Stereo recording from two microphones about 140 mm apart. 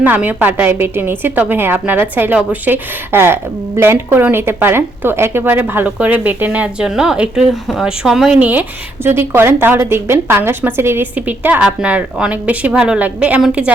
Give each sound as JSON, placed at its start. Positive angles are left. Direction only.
{"t": 0.0, "sound": "a woman's voice", "side_deg": -10}